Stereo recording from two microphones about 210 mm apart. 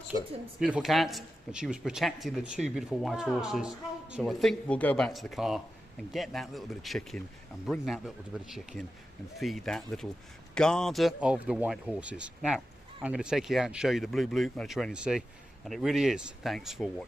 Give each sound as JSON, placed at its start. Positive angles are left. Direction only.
{"t": 0.1, "sound": "speech", "side_deg": 25}
{"t": 0.6, "sound": "speech", "side_deg": 0}